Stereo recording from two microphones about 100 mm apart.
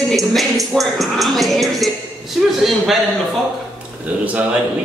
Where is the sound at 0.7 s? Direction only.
Centre (ahead or behind).